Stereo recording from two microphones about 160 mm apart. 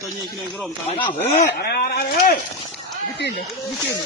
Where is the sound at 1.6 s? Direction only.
80° left.